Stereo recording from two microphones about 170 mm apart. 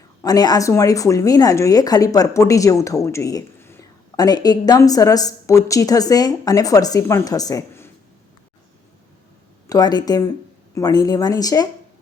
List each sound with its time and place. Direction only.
0.2 s speech: 20° left (ahead or behind)
9.6 s speech: 25° left (ahead or behind)